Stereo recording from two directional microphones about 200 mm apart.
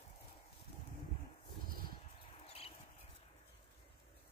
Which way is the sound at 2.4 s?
30° left (ahead or behind).